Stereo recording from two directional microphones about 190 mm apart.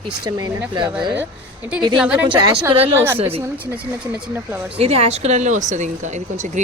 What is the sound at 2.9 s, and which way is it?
Speech, 10° right (ahead or behind).